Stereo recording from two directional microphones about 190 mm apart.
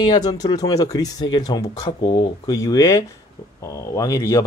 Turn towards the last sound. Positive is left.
turn(degrees=15)  # may be behind; listen again after turning